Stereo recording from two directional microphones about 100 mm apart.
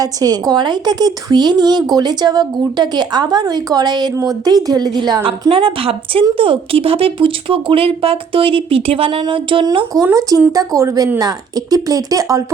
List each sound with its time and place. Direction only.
0.0 s a woman's voice: 40° right (ahead or behind)
5.2 s a woman's voice: 60° right (ahead or behind)
9.2 s a woman's voice: 60° right (ahead or behind)
10.2 s speech: 35° right (ahead or behind)